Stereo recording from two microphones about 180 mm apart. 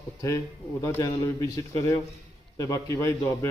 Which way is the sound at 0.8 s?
15° left (ahead or behind).